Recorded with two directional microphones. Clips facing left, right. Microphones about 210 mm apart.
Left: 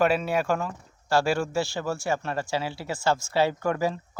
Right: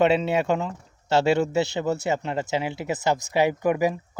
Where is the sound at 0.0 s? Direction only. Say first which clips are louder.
Right 3 dB; 20° right (ahead or behind).